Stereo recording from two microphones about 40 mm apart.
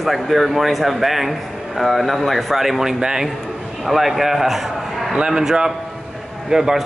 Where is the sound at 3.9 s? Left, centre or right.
Centre.